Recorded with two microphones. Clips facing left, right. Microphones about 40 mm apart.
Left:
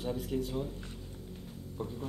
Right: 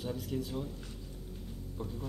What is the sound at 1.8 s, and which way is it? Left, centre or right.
Speech, centre.